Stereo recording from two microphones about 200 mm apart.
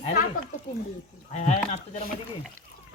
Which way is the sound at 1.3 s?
35° left (ahead or behind).